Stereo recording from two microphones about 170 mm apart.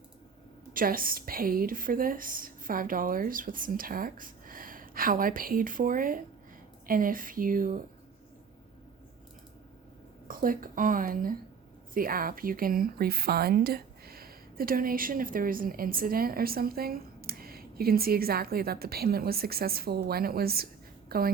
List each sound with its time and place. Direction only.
0.7 s speech: 55° right (ahead or behind)
10.2 s a woman's voice: 55° right (ahead or behind)